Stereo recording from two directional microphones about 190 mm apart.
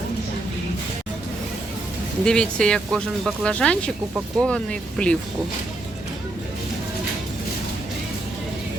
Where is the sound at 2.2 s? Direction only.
5° left (ahead or behind).